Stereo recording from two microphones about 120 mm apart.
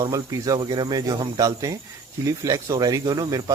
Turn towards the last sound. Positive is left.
turn(degrees=-35)  # may be behind; listen again after turning